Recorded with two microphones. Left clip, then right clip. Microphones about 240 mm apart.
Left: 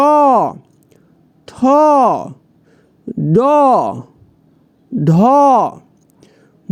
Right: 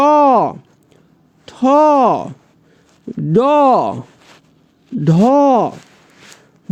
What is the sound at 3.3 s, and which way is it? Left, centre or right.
Speech, centre.